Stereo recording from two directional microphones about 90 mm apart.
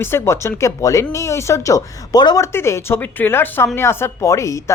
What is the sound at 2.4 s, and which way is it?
Speech, 30° left (ahead or behind).